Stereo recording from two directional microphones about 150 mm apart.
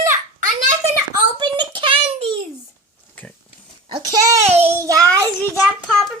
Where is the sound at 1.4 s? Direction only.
30° right (ahead or behind).